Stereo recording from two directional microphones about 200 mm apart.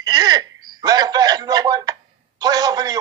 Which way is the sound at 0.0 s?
20° right (ahead or behind).